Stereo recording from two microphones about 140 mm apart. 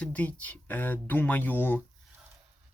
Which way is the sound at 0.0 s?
10° left (ahead or behind).